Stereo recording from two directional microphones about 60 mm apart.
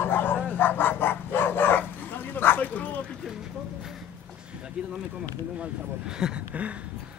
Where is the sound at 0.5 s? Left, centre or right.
Left.